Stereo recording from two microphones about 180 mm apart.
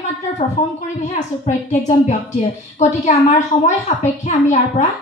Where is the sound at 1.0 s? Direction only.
40° left (ahead or behind).